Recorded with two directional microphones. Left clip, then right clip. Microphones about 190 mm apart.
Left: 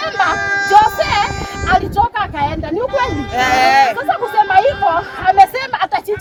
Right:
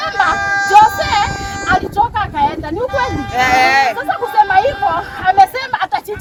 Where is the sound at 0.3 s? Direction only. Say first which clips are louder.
Right 1 dB; 45° right (ahead or behind).